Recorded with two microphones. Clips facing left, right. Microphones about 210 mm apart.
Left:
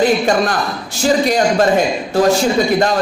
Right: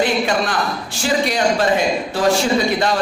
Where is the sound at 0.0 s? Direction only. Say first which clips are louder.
Left 4 dB; 45° left (ahead or behind).